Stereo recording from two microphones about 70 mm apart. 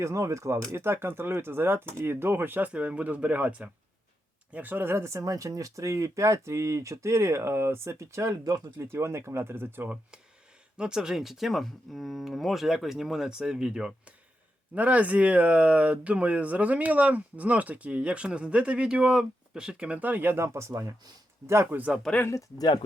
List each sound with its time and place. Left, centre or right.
0.0 s speech: right
5.0 s speech: right
10.8 s speech: centre; by 20.4 s right
20.4 s speech: right
22.3 s speech: left